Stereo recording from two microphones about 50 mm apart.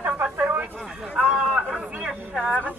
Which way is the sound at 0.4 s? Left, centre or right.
Right.